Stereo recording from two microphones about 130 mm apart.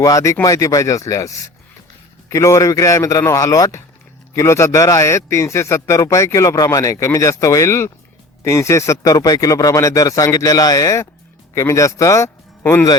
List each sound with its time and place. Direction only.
0.0 s a man's voice: 25° left (ahead or behind)